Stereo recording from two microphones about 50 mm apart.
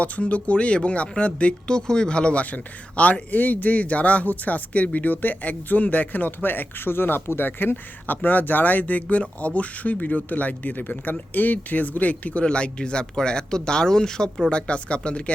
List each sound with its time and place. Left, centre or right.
0.0 s speech: left